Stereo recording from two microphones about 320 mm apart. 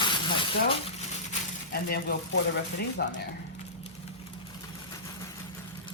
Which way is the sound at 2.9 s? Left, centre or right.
Left.